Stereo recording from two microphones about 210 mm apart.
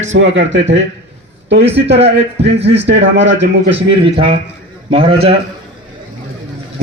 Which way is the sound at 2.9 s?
60° right (ahead or behind).